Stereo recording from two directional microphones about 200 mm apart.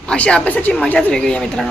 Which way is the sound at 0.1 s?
5° left (ahead or behind).